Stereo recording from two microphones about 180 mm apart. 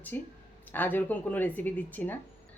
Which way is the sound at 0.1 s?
10° left (ahead or behind).